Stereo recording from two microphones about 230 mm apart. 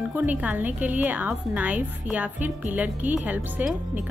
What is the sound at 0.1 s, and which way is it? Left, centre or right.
A woman's voice, centre.